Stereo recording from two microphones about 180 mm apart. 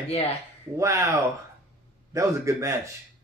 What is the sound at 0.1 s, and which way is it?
Speech, 35° left (ahead or behind).